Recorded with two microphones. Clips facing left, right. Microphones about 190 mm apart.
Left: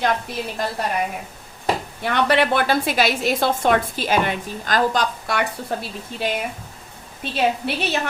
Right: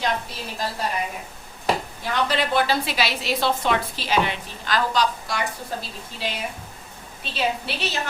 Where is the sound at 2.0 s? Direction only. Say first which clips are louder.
Left 5 dB; 65° left (ahead or behind).